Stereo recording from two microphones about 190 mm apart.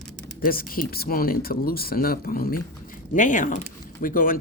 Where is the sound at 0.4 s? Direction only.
50° left (ahead or behind).